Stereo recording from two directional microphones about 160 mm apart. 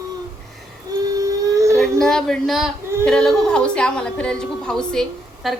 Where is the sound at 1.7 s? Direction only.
5° left (ahead or behind).